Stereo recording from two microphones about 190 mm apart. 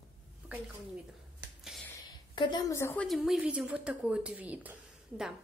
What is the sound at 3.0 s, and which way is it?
Speech, centre (ahead or behind).